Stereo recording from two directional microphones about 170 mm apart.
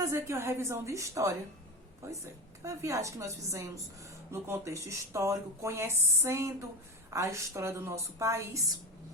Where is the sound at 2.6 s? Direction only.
20° right (ahead or behind).